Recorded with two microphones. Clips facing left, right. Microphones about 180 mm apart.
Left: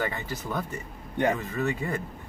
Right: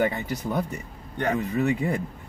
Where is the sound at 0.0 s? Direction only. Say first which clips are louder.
Right 6 dB; 20° right (ahead or behind).